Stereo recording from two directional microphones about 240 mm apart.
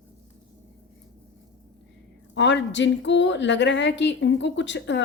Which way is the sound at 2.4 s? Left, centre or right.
Left.